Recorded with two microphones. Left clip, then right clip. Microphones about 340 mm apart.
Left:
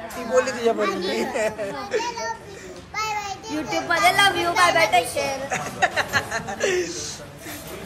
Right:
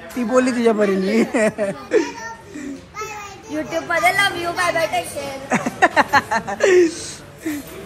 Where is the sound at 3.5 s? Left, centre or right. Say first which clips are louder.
Right 2 dB; centre.